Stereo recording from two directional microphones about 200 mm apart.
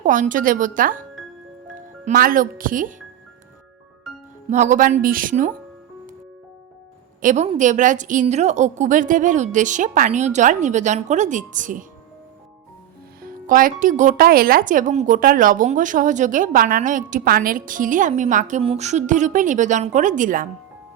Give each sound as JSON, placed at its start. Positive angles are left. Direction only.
{"t": 0.0, "sound": "speech", "side_deg": -40}
{"t": 4.4, "sound": "speech", "side_deg": -35}
{"t": 7.2, "sound": "a woman's voice", "side_deg": -40}
{"t": 13.2, "sound": "speech", "side_deg": -45}